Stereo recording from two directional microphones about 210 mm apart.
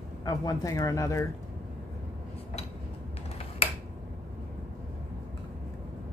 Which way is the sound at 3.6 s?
30° left (ahead or behind).